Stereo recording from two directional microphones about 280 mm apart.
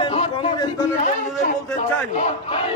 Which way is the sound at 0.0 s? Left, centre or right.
Centre.